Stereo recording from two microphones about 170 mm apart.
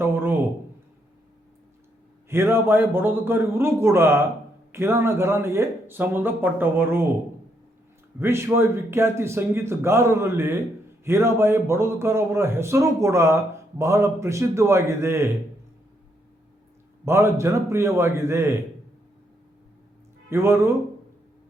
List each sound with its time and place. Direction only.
0.0 s a sound: 15° right (ahead or behind)
2.3 s a man's voice: 15° right (ahead or behind)
8.2 s a man's voice: 15° right (ahead or behind)
17.1 s a man's voice: 15° right (ahead or behind)
20.3 s a man's voice: 15° right (ahead or behind)